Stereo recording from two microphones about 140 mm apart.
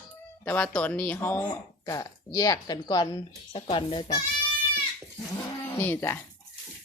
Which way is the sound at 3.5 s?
40° left (ahead or behind).